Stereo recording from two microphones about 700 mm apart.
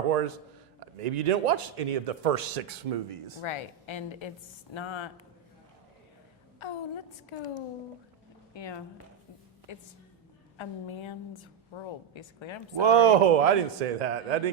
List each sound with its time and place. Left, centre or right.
0.9 s speech: right
3.4 s a woman's voice: left
6.6 s a woman's voice: left
8.5 s a woman's voice: left
12.8 s speech: right